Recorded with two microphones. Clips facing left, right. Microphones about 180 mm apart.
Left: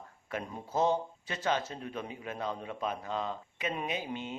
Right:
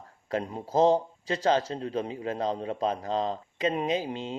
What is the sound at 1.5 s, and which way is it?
A man's voice, 35° right (ahead or behind).